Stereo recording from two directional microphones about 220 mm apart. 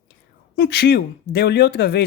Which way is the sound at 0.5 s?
50° left (ahead or behind).